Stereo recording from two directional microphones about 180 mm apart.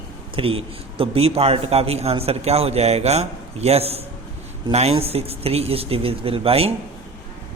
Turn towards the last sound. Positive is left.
turn(degrees=-35)  # may be behind; listen again after turning